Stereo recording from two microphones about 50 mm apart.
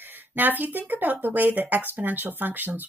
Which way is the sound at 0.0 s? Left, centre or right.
Right.